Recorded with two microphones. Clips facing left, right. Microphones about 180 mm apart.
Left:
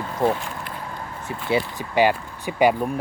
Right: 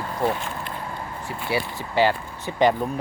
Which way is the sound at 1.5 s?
20° left (ahead or behind).